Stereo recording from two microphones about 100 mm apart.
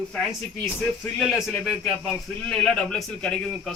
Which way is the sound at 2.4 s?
10° left (ahead or behind).